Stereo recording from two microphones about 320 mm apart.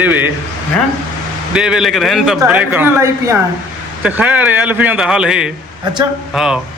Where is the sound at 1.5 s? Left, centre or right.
Centre.